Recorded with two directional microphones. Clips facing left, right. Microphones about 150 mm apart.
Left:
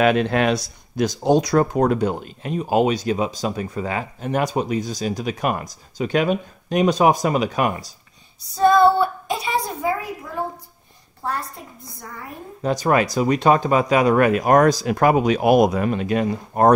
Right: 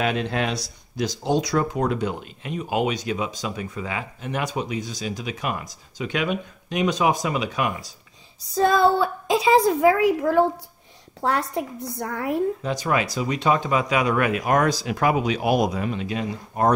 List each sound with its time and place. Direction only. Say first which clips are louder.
0.0 s speech: left 7 dB; 60° left (ahead or behind); by 7.7 s 45° left (ahead or behind)
9.7 s a woman's voice: right 8 dB; 90° right
11.5 s a woman's voice: right 12 dB; 75° right (ahead or behind)
12.6 s speech: left 5 dB; 45° left (ahead or behind)